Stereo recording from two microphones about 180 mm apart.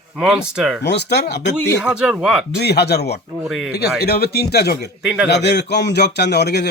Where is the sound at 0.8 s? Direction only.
70° left (ahead or behind).